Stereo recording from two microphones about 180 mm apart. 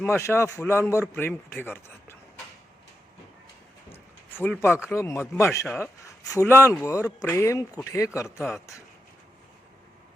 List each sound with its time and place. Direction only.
0.0 s speech: 15° left (ahead or behind)
3.9 s a sound: 10° left (ahead or behind)
4.9 s speech: 15° left (ahead or behind)
6.2 s speech: 15° left (ahead or behind)
8.4 s speech: centre (ahead or behind)